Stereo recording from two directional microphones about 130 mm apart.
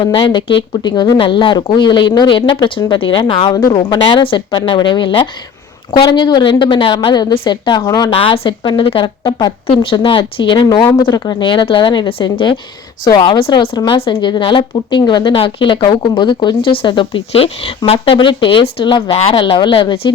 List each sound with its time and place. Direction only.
0.0 s a woman's voice: 40° left (ahead or behind)
3.5 s a woman's voice: 30° left (ahead or behind)